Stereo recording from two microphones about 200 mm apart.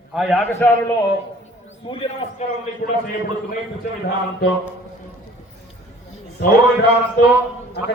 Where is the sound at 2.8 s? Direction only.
45° left (ahead or behind).